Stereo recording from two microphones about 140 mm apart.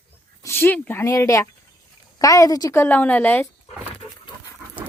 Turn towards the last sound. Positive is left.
turn(degrees=15)  # may be behind; listen again after turning